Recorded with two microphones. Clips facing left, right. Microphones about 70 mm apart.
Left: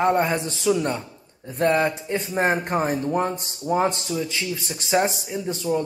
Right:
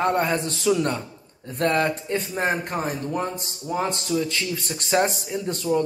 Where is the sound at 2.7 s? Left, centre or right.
Left.